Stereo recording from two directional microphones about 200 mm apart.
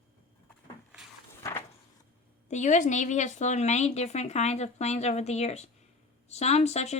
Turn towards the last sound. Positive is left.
turn(degrees=35)  # may be behind; listen again after turning